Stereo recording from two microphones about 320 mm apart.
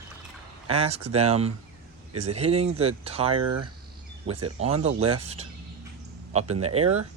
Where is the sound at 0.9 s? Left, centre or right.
Right.